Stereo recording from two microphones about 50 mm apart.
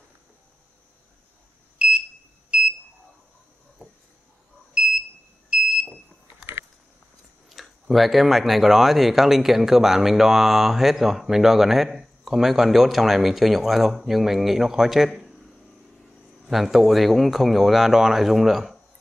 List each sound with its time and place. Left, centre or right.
1.8 s alarm: right
2.5 s a sound: right
4.8 s smoke detector: right
7.4 s speech: centre
16.4 s speech: centre